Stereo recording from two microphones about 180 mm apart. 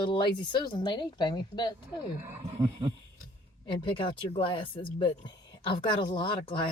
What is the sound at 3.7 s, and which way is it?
Speech, 30° left (ahead or behind).